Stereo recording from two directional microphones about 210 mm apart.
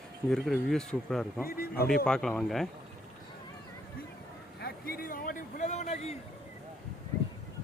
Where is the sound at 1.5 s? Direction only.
45° left (ahead or behind).